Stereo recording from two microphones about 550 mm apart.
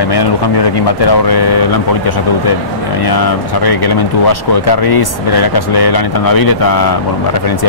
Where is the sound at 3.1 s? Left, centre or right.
Left.